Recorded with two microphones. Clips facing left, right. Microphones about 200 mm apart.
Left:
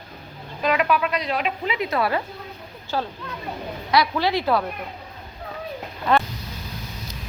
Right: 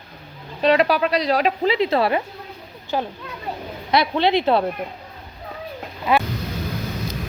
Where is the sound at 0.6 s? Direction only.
30° right (ahead or behind).